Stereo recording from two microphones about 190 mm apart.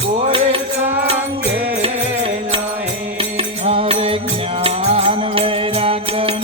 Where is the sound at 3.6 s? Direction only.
30° right (ahead or behind).